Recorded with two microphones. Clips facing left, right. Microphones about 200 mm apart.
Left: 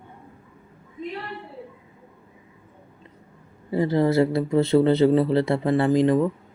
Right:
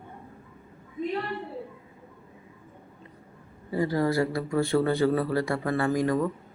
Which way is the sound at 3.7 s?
25° left (ahead or behind).